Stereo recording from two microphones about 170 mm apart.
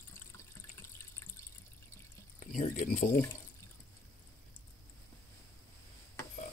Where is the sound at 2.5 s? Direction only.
55° left (ahead or behind).